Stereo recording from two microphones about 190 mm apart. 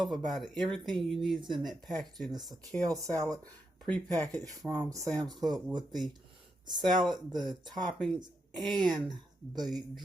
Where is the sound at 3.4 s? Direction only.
5° left (ahead or behind).